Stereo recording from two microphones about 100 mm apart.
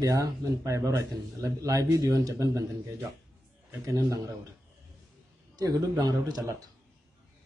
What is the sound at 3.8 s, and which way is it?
Speech, 30° right (ahead or behind).